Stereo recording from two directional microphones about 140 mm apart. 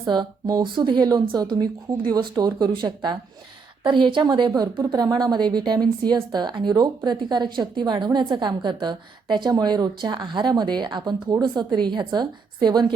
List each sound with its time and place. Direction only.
0.0 s a woman's voice: 25° right (ahead or behind)